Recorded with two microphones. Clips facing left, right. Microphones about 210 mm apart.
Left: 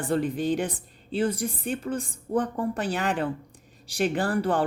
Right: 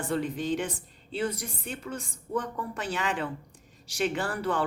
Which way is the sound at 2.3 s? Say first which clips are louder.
Left 6 dB; 35° left (ahead or behind).